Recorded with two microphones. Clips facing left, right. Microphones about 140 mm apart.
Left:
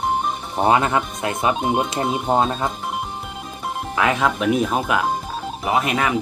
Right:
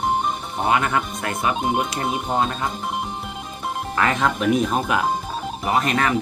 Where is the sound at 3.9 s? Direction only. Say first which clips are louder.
Left 2 dB; 5° left (ahead or behind).